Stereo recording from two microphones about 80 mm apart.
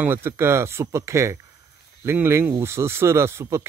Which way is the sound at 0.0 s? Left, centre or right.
Right.